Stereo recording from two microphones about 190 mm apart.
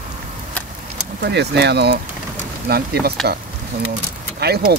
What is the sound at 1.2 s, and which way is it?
Speech, 60° right (ahead or behind).